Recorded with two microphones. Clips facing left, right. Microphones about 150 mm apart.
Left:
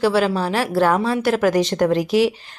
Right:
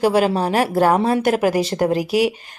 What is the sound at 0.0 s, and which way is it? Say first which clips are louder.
Speech: right 1 dB; 15° right (ahead or behind).